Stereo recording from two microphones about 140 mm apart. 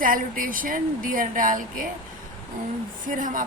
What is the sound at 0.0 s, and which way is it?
Speech, 75° right (ahead or behind).